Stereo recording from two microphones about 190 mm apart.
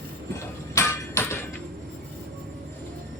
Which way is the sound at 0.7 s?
15° left (ahead or behind).